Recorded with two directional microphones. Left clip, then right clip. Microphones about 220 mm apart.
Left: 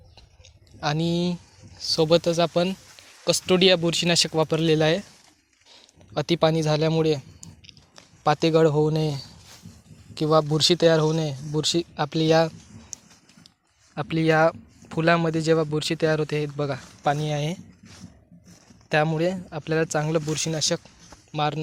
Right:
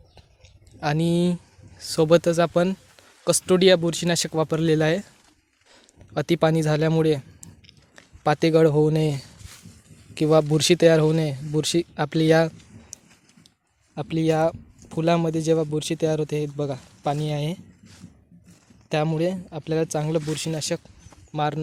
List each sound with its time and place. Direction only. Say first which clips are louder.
0.8 s speech: right 2 dB; 35° right (ahead or behind)
18.9 s speech: left 1 dB; 25° right (ahead or behind)